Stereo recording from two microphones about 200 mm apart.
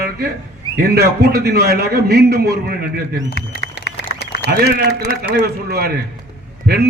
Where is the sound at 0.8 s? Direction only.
50° right (ahead or behind).